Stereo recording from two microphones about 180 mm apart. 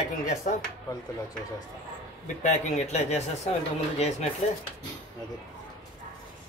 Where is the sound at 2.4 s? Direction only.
40° left (ahead or behind).